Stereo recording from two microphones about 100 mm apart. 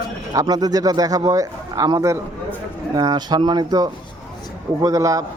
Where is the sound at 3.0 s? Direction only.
40° right (ahead or behind).